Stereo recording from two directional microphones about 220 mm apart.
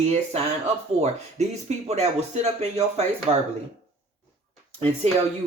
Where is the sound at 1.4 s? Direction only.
30° right (ahead or behind).